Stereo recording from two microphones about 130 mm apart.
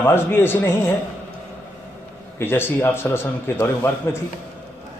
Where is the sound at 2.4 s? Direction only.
15° left (ahead or behind).